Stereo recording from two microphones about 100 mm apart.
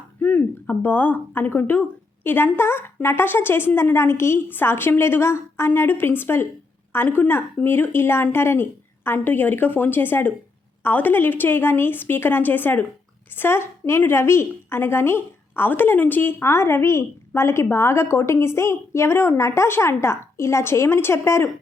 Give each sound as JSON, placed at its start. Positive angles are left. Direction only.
{"t": 0.2, "sound": "a woman's voice", "side_deg": 15}